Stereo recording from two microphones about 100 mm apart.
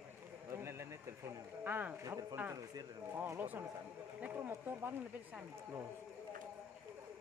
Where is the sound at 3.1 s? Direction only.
20° right (ahead or behind).